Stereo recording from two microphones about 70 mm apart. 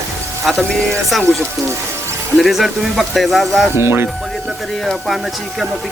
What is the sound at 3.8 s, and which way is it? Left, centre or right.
Speech, right.